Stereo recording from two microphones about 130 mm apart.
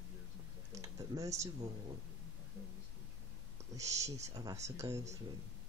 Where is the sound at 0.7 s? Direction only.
25° right (ahead or behind).